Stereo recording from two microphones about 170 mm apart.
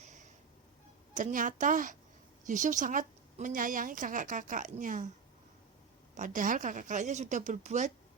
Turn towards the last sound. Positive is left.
turn(degrees=-45)  # may be behind; listen again after turning